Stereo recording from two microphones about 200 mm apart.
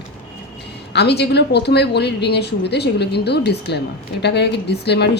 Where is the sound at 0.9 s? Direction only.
55° left (ahead or behind).